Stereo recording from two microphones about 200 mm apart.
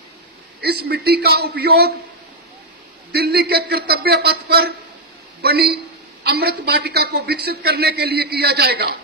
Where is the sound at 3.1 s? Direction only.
55° right (ahead or behind).